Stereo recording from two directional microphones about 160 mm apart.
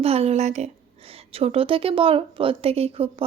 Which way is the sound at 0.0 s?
40° right (ahead or behind).